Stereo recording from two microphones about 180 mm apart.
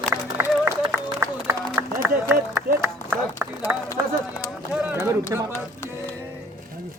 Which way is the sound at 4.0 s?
10° right (ahead or behind).